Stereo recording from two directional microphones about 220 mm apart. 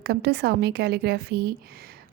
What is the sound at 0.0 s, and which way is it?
A woman's voice, 45° right (ahead or behind).